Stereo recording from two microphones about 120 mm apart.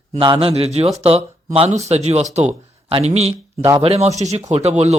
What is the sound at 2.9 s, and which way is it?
Speech, 65° right (ahead or behind).